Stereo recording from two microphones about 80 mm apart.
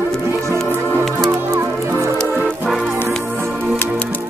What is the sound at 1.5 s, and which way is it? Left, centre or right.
Music, right.